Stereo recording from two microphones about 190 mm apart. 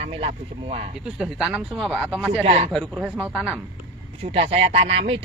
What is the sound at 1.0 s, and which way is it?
Speech, 5° right (ahead or behind).